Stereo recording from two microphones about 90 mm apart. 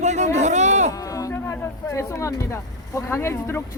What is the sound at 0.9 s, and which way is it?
Speech, 40° left (ahead or behind).